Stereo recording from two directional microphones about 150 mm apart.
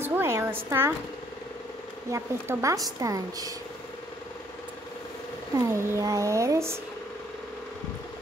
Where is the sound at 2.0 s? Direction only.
20° right (ahead or behind).